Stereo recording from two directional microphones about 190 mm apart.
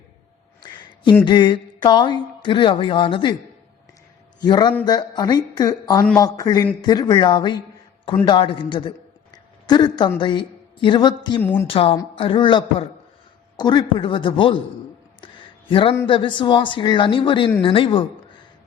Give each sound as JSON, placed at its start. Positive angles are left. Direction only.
{"t": 1.2, "sound": "speech", "side_deg": 25}
{"t": 4.4, "sound": "speech", "side_deg": 25}
{"t": 11.3, "sound": "speech", "side_deg": 10}
{"t": 11.6, "sound": "speech", "side_deg": 30}
{"t": 15.7, "sound": "speech", "side_deg": 25}